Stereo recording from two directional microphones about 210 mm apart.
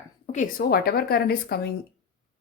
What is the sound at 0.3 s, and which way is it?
A woman's voice, 40° left (ahead or behind).